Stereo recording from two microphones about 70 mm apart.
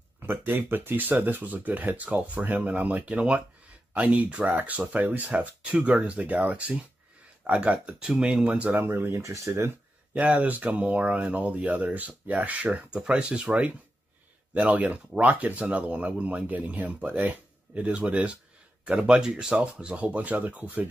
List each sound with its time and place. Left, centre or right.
0.3 s speech: right
10.1 s speech: centre